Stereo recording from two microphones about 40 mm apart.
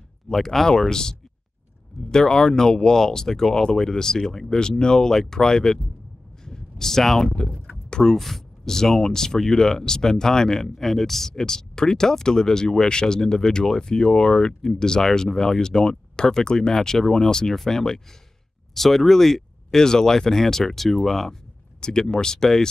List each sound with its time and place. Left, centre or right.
0.3 s speech: centre